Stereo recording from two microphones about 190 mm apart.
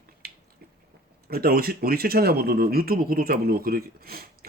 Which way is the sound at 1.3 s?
50° right (ahead or behind).